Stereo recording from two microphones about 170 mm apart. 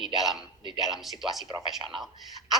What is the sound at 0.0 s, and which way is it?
A man's voice, centre (ahead or behind).